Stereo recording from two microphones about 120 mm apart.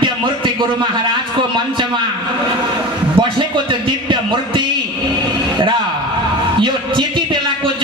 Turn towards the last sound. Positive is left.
turn(degrees=-45)  # may be behind; listen again after turning